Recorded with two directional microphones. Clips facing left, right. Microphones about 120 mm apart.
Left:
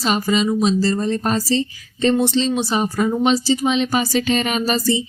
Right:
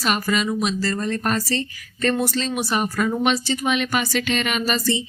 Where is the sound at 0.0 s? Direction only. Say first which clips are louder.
Left 4 dB; 25° left (ahead or behind).